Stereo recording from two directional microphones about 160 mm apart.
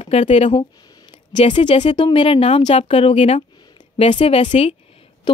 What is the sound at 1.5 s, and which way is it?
A woman's voice, 35° left (ahead or behind).